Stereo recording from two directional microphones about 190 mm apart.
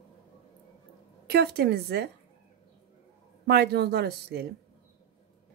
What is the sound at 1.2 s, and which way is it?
Speech, 60° right (ahead or behind).